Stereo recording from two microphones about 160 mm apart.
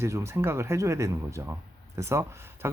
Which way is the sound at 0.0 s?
20° right (ahead or behind).